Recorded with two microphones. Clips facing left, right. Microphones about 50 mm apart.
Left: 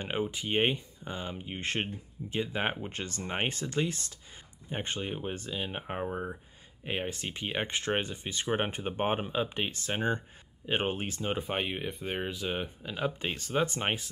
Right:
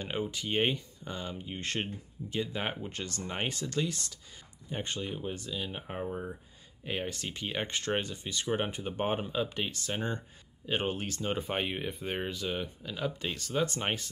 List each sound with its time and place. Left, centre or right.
0.0 s speech: left
11.3 s speech: centre
12.4 s speech: left